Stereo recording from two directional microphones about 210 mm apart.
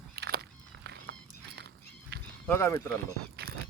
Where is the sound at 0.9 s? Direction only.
55° right (ahead or behind).